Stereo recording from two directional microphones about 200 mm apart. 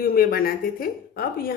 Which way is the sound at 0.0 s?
50° left (ahead or behind).